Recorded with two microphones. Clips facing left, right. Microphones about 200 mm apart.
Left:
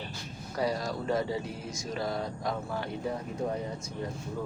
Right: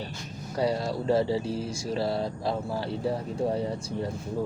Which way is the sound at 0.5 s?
30° right (ahead or behind).